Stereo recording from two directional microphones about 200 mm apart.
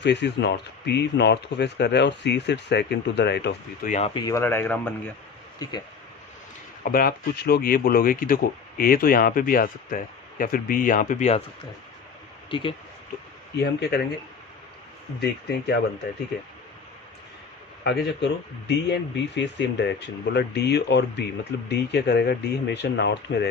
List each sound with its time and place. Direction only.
0.0 s speech: 60° left (ahead or behind)
3.8 s speech: 35° left (ahead or behind)
4.1 s speech: 20° left (ahead or behind)
6.8 s speech: 50° left (ahead or behind)
12.5 s speech: 25° left (ahead or behind)
13.6 s speech: 55° left (ahead or behind)
15.2 s speech: 55° left (ahead or behind)
17.8 s speech: 60° left (ahead or behind)